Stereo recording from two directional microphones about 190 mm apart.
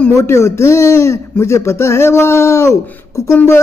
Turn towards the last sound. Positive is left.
turn(degrees=15)  # may be behind; listen again after turning